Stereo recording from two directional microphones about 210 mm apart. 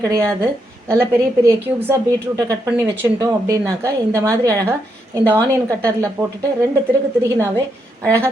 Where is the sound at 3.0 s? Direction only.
15° right (ahead or behind).